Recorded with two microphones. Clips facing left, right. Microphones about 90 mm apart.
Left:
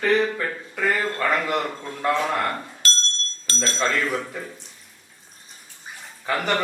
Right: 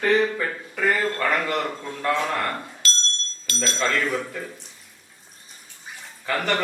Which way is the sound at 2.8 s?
35° left (ahead or behind).